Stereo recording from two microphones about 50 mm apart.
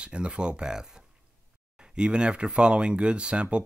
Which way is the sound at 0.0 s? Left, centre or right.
Right.